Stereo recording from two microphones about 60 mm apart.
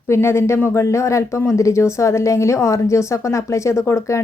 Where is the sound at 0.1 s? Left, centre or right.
Left.